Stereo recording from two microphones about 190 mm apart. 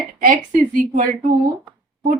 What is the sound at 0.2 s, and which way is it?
Speech, 45° right (ahead or behind).